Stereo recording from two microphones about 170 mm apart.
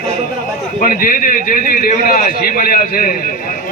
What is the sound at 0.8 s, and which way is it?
A man's voice, 55° left (ahead or behind).